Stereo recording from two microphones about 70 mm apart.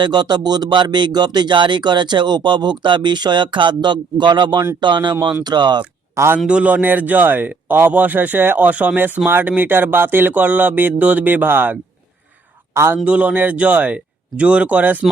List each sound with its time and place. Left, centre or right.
0.0 s speech: right
6.2 s a man's voice: right
6.5 s speech: centre; by 13.0 s right
13.1 s speech: centre